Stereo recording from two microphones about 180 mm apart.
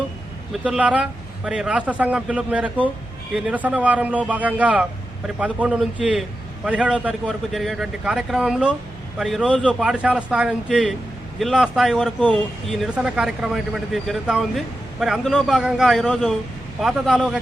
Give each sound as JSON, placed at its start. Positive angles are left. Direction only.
{"t": 0.5, "sound": "speech", "side_deg": -5}